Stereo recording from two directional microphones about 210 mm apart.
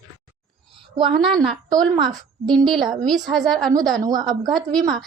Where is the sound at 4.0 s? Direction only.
15° right (ahead or behind).